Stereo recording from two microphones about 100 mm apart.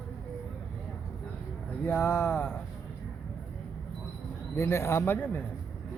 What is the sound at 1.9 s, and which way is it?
Speech, 20° left (ahead or behind).